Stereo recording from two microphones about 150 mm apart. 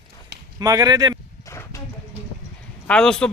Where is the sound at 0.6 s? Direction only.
25° right (ahead or behind).